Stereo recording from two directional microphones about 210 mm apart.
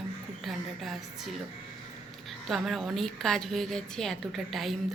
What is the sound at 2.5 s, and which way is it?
A woman's voice, centre (ahead or behind).